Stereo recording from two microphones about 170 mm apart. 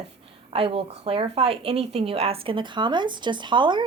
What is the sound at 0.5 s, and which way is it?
A woman's voice, 35° right (ahead or behind).